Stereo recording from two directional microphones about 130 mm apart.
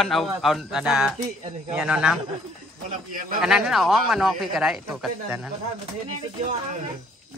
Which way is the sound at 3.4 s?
5° right (ahead or behind).